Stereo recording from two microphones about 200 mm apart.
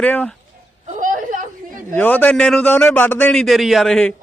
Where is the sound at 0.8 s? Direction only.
40° right (ahead or behind).